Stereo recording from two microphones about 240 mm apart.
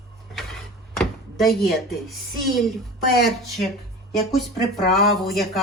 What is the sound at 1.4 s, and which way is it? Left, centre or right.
Speech, left.